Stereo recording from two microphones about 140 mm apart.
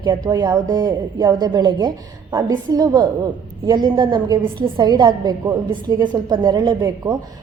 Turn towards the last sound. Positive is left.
turn(degrees=-30)  # may be behind; listen again after turning